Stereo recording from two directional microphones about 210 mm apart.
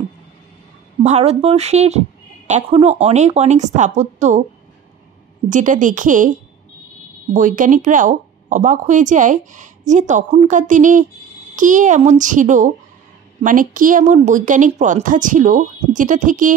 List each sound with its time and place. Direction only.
1.0 s speech: 30° right (ahead or behind)
5.5 s speech: 40° right (ahead or behind)
7.3 s speech: 40° right (ahead or behind)